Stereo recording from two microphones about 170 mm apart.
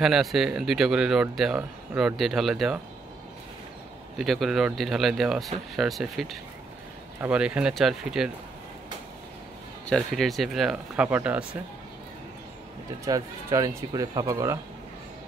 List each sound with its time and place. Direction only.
0.0 s speech: centre (ahead or behind)
4.2 s speech: centre (ahead or behind)
9.8 s speech: centre (ahead or behind)
13.0 s speech: 20° right (ahead or behind)